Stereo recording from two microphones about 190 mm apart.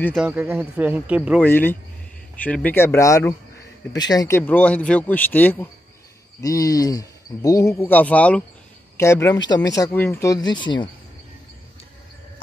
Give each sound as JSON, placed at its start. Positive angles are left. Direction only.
{"t": 0.2, "sound": "speech", "side_deg": -5}
{"t": 1.4, "sound": "speech", "side_deg": 10}